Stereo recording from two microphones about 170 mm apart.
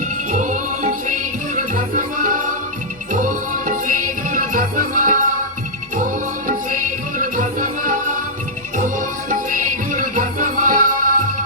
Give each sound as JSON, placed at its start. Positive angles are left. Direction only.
{"t": 0.3, "sound": "music", "side_deg": -50}
{"t": 7.2, "sound": "music", "side_deg": -50}